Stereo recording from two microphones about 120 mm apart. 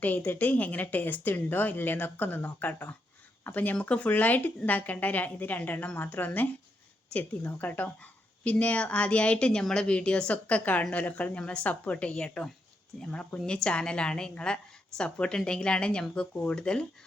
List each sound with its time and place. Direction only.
0.0 s a woman's voice: 15° left (ahead or behind)